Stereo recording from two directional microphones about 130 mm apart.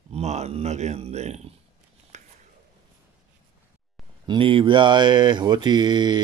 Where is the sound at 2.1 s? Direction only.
60° right (ahead or behind).